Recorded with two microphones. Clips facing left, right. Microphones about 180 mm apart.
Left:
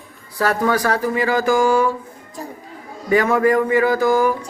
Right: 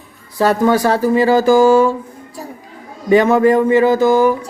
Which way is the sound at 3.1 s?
25° right (ahead or behind).